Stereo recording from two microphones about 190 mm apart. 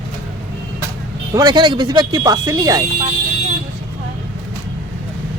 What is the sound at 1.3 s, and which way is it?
Speech, 20° right (ahead or behind).